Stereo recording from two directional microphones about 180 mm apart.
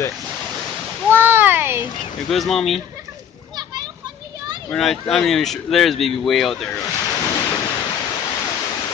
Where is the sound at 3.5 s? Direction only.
25° right (ahead or behind).